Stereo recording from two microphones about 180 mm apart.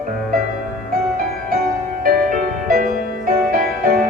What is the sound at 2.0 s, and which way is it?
Music, 50° right (ahead or behind).